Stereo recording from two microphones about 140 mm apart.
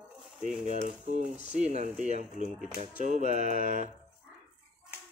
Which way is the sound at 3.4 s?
70° left (ahead or behind).